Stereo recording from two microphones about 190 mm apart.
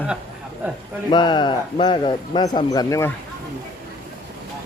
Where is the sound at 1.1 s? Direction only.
25° left (ahead or behind).